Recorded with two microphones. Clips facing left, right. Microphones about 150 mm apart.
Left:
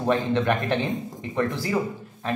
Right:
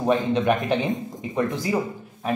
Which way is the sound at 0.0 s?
15° right (ahead or behind).